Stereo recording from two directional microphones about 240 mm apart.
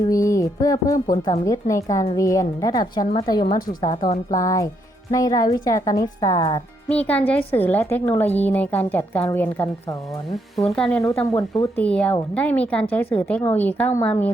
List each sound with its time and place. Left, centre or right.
0.1 s music: centre
1.2 s speech: centre